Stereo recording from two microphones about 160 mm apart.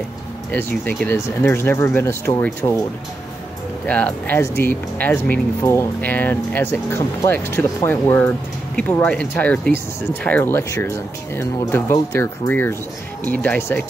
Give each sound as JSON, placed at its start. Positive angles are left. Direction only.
{"t": 0.5, "sound": "speech", "side_deg": 10}
{"t": 3.8, "sound": "speech", "side_deg": 10}